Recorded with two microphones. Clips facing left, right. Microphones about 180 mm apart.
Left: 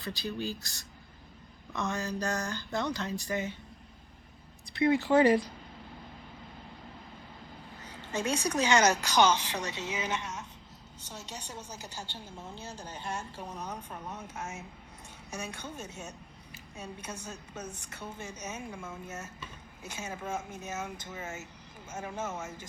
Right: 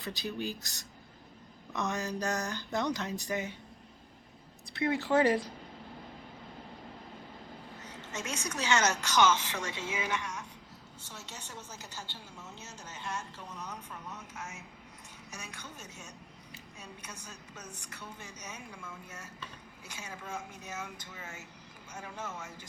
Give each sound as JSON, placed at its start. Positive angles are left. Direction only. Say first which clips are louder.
{"t": 0.0, "sound": "speech", "louder": "left 1 dB", "side_deg": -20}
{"t": 1.7, "sound": "a sound", "louder": "left 1 dB", "side_deg": -20}
{"t": 4.7, "sound": "speech", "louder": "left 4 dB", "side_deg": 0}
{"t": 7.9, "sound": "a sound", "louder": "left 8 dB", "side_deg": 30}
{"t": 8.5, "sound": "speech", "louder": "left 4 dB", "side_deg": 15}
{"t": 9.1, "sound": "a woman's voice", "louder": "even", "side_deg": 35}
{"t": 9.5, "sound": "speech", "louder": "left 2 dB", "side_deg": 20}
{"t": 11.8, "sound": "a woman's voice", "louder": "left 3 dB", "side_deg": 35}